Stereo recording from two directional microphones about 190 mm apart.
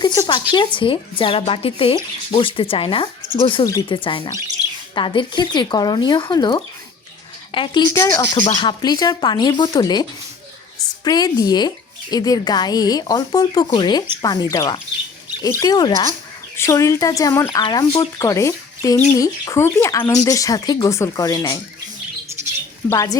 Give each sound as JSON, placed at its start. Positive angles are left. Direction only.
{"t": 0.0, "sound": "a sound", "side_deg": 25}
{"t": 0.5, "sound": "speech", "side_deg": 25}
{"t": 22.9, "sound": "speech", "side_deg": 15}